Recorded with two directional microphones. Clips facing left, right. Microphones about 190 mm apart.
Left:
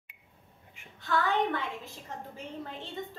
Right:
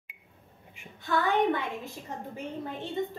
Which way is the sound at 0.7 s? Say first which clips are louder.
Right 1 dB; 15° right (ahead or behind).